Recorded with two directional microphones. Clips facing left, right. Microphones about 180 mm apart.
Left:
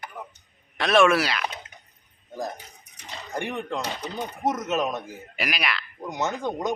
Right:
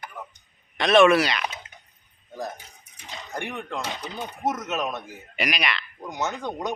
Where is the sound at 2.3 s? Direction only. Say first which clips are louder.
Left 1 dB; 15° left (ahead or behind).